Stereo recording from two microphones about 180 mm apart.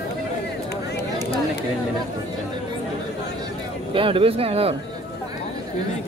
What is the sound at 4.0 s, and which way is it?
Speech, 30° right (ahead or behind).